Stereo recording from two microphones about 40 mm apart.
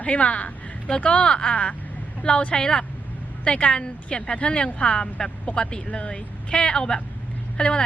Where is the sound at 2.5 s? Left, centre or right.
Centre.